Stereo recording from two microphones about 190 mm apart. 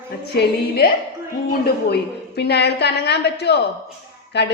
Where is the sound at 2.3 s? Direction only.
60° left (ahead or behind).